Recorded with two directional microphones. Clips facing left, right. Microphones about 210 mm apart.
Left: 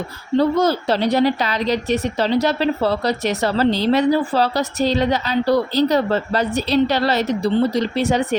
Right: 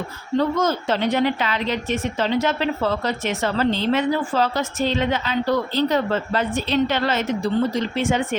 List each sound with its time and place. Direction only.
0.3 s a woman's voice: 35° left (ahead or behind)